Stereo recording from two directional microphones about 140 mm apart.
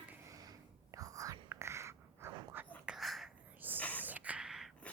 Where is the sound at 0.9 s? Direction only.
25° right (ahead or behind).